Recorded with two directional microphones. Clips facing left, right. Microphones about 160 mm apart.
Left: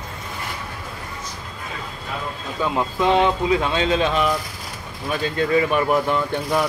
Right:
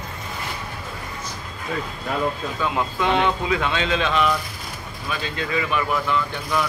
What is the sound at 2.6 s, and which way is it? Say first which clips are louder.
Speech: left 3 dB; 35° left (ahead or behind).